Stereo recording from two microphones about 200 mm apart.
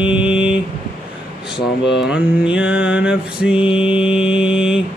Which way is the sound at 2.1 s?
5° right (ahead or behind).